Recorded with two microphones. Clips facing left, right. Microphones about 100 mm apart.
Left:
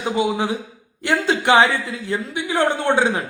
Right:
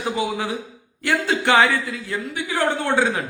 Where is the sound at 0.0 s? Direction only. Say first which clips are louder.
Left 3 dB; 20° left (ahead or behind).